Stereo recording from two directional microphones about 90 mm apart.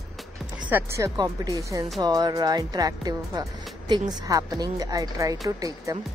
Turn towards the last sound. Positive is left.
turn(degrees=-40)  # may be behind; listen again after turning